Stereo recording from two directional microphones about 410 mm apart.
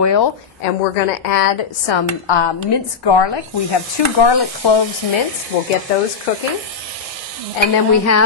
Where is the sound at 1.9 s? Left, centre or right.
Left.